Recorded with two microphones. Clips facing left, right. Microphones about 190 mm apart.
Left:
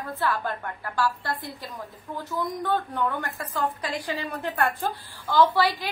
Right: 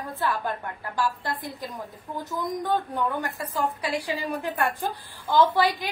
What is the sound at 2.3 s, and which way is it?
A woman's voice, 15° right (ahead or behind).